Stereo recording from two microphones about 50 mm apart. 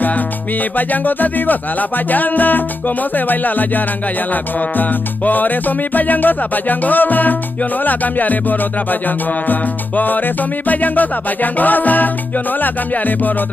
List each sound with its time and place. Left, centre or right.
0.7 s music: left